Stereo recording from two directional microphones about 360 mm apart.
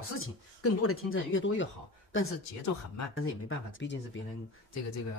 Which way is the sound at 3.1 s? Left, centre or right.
Left.